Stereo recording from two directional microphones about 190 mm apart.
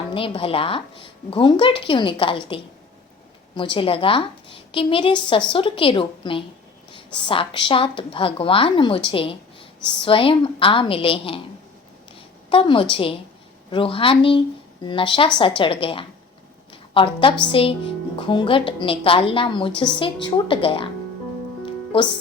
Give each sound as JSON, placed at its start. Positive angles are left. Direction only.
{"t": 0.1, "sound": "a woman's voice", "side_deg": 30}
{"t": 12.5, "sound": "a woman's voice", "side_deg": 25}